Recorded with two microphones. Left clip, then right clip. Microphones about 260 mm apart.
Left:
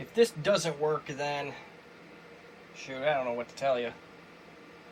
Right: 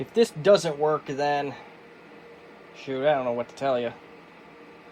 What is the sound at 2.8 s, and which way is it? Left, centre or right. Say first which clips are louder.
Speech: right 6 dB; right.